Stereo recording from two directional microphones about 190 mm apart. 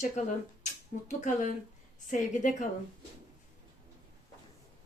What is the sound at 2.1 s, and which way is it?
Speech, 40° left (ahead or behind).